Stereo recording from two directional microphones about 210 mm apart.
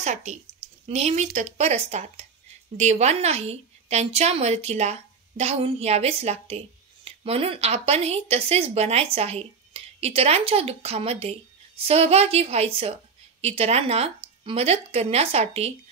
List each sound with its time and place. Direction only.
0.0 s a woman's voice: 35° right (ahead or behind)